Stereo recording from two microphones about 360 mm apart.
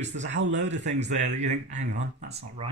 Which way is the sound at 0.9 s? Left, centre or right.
Centre.